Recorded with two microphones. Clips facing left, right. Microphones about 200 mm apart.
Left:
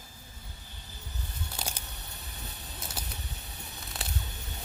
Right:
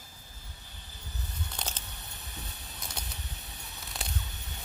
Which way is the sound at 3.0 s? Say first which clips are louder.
Left 2 dB; 5° left (ahead or behind).